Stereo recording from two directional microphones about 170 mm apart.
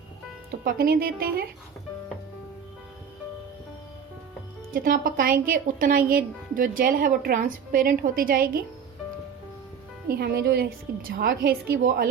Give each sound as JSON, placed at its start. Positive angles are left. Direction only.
{"t": 0.6, "sound": "speech", "side_deg": -60}
{"t": 4.7, "sound": "speech", "side_deg": -55}
{"t": 10.1, "sound": "speech", "side_deg": -65}